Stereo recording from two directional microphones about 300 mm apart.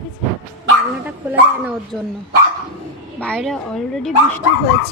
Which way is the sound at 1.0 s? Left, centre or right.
Centre.